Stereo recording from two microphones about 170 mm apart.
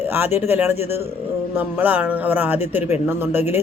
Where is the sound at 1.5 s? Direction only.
10° right (ahead or behind).